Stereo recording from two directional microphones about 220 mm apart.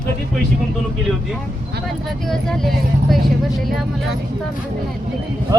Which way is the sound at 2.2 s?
Centre (ahead or behind).